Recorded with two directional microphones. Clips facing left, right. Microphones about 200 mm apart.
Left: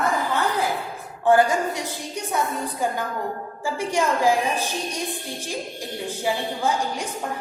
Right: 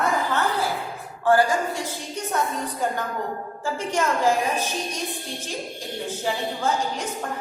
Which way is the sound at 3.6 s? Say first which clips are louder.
Left 2 dB; 10° left (ahead or behind).